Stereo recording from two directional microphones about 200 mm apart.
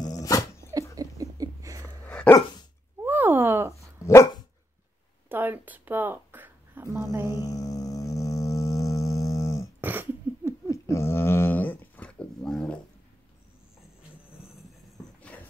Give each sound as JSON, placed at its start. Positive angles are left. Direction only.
{"t": 0.2, "sound": "dog", "side_deg": 15}
{"t": 0.9, "sound": "a sound", "side_deg": -15}
{"t": 1.8, "sound": "dog", "side_deg": 10}
{"t": 3.1, "sound": "a sound", "side_deg": -10}
{"t": 4.0, "sound": "dog", "side_deg": 15}
{"t": 5.3, "sound": "a sound", "side_deg": -10}
{"t": 7.2, "sound": "music", "side_deg": 20}
{"t": 9.8, "sound": "throat clearing", "side_deg": -10}
{"t": 10.7, "sound": "dog", "side_deg": 15}